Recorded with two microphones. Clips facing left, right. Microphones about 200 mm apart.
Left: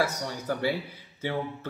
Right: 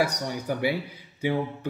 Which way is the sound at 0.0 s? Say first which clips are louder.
Right 2 dB; 15° right (ahead or behind).